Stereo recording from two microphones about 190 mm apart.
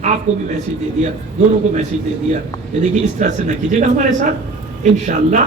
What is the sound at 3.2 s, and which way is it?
A man's voice, 40° right (ahead or behind).